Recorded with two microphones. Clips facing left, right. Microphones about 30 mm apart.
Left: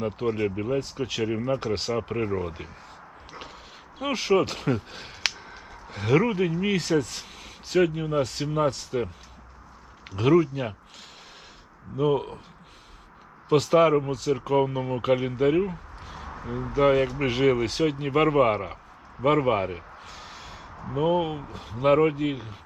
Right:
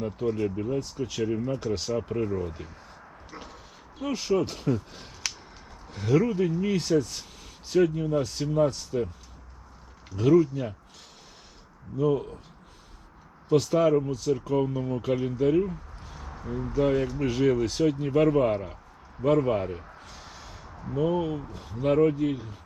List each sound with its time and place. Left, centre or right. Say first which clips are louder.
0.0 s speech: left 2 dB; left
3.3 s dog: left 1 dB; left
4.0 s speech: left 3 dB; left
10.1 s speech: even; left
11.9 s speech: left 1 dB; left
13.5 s speech: left 2 dB; left